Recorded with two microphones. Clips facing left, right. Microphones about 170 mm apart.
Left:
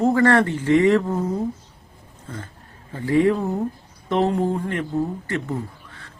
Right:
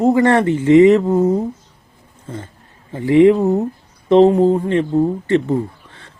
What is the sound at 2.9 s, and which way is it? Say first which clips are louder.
A man's voice: right 8 dB; 20° right (ahead or behind).